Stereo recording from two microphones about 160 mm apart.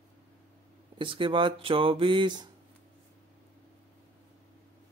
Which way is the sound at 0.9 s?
30° right (ahead or behind).